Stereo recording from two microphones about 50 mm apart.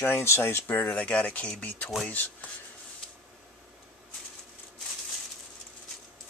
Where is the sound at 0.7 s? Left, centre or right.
Left.